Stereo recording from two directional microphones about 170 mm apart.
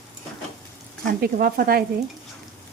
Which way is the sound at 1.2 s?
55° right (ahead or behind).